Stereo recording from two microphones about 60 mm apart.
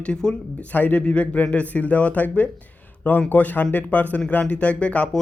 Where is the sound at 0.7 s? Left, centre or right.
Left.